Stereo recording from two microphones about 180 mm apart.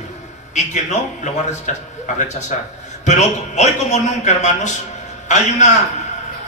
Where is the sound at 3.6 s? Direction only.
40° left (ahead or behind).